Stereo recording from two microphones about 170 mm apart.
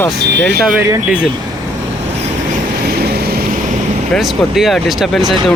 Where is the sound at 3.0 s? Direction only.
70° right (ahead or behind).